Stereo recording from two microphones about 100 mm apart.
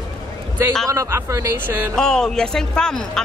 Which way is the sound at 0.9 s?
30° right (ahead or behind).